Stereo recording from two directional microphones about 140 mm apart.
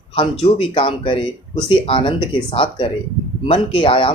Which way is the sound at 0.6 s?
40° left (ahead or behind).